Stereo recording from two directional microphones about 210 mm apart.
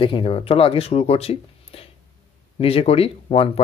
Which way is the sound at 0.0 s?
25° left (ahead or behind).